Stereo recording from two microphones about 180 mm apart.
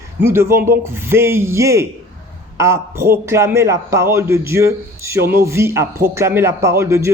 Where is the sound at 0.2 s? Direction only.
15° right (ahead or behind).